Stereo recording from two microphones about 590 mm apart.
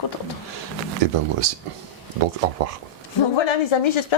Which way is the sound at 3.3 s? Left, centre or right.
Left.